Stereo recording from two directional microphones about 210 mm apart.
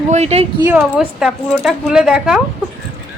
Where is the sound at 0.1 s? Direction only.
30° right (ahead or behind).